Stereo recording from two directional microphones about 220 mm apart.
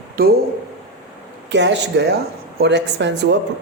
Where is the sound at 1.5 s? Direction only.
50° right (ahead or behind).